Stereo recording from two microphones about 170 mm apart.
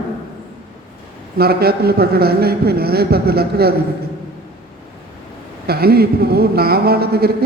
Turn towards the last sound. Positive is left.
turn(degrees=-65)  # may be behind; listen again after turning